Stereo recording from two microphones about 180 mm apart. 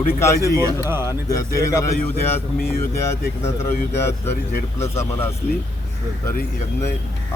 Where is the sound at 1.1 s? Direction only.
20° left (ahead or behind).